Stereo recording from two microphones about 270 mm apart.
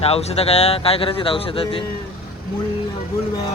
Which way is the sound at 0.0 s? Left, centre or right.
Left.